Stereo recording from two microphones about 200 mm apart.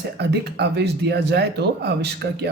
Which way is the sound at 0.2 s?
55° right (ahead or behind).